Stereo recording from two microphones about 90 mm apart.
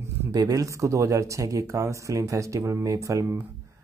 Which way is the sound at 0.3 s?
45° right (ahead or behind).